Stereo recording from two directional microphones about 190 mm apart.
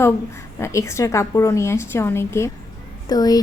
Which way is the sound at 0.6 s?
15° left (ahead or behind).